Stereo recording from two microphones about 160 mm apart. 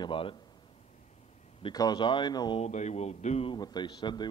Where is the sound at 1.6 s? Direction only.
25° left (ahead or behind).